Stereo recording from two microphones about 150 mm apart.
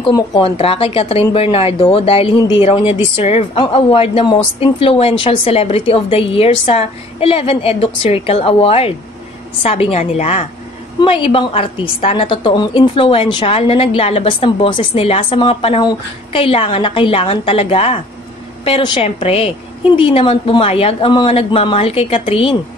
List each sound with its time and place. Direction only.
0.4 s a woman's voice: 40° left (ahead or behind)